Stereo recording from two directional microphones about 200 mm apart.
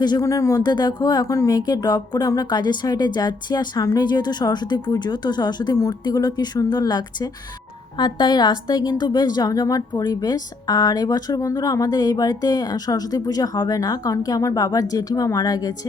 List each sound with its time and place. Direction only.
0.0 s a woman's voice: 20° left (ahead or behind)